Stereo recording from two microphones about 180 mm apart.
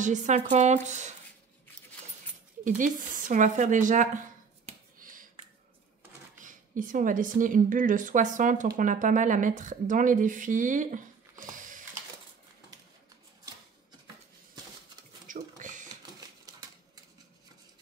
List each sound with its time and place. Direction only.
0.0 s speech: 40° right (ahead or behind)
2.6 s speech: 45° right (ahead or behind)
4.6 s finger snapping: 50° right (ahead or behind)
6.4 s speech: 45° right (ahead or behind)
11.5 s a sound: 45° right (ahead or behind)
15.2 s a sound: 45° right (ahead or behind)